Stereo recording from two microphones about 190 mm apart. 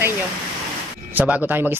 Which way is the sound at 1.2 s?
10° right (ahead or behind).